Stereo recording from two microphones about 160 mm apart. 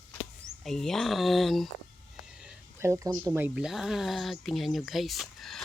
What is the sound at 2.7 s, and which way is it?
Speech, 15° right (ahead or behind).